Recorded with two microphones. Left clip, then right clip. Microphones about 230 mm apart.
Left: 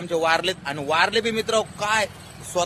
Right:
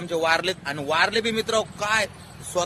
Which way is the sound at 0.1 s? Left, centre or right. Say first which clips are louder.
Left 1 dB; centre.